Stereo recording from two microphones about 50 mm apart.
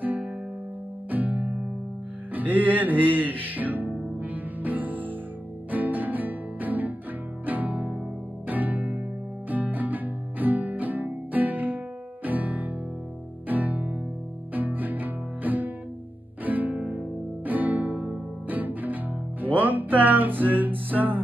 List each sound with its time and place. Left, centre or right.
0.0 s music: right